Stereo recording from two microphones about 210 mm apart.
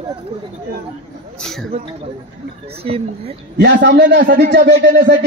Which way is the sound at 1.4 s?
Centre (ahead or behind).